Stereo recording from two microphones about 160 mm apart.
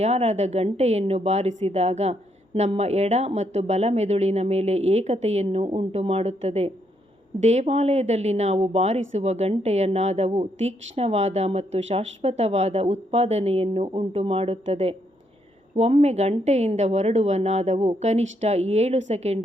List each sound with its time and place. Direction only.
0.0 s a woman's voice: 45° right (ahead or behind)